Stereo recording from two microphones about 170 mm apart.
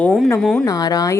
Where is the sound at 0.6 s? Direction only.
20° left (ahead or behind).